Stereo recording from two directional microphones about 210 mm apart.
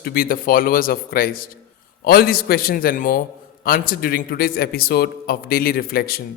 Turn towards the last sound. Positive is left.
turn(degrees=45)  # may be behind; listen again after turning